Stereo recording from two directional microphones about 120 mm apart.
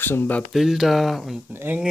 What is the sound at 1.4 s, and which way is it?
Speech, 15° right (ahead or behind).